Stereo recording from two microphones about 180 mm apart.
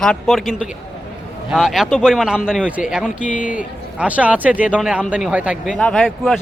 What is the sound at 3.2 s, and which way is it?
Speech, 45° left (ahead or behind).